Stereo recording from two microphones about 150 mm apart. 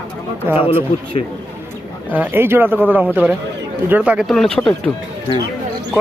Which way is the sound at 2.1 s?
10° right (ahead or behind).